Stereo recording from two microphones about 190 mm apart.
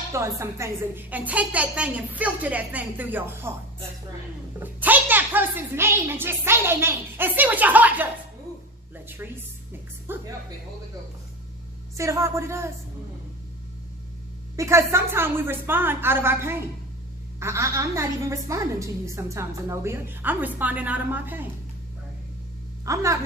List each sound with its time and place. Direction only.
0.1 s a woman's voice: 15° right (ahead or behind)
4.6 s a woman's voice: 10° right (ahead or behind)
9.0 s a woman's voice: 10° right (ahead or behind)
11.9 s a woman's voice: 15° right (ahead or behind)
14.5 s a woman's voice: 15° right (ahead or behind)
22.9 s a woman's voice: 15° right (ahead or behind)